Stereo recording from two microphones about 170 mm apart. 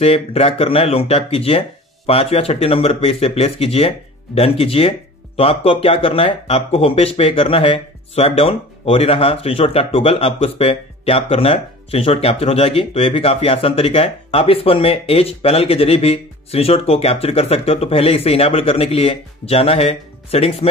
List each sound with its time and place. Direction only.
0.0 s speech: 35° left (ahead or behind)